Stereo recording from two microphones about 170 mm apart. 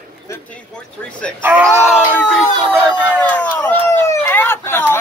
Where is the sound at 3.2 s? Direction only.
10° left (ahead or behind).